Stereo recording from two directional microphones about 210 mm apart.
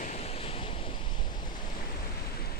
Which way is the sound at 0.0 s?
30° left (ahead or behind).